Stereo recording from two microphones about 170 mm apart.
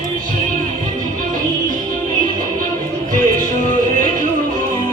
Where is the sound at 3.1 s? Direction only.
50° right (ahead or behind).